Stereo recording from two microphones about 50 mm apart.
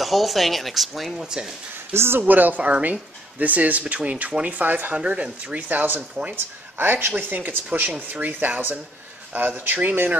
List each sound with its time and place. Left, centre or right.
0.0 s speech: centre
1.2 s speech: centre
2.0 s speech: right
2.2 s speech: right
4.9 s speech: right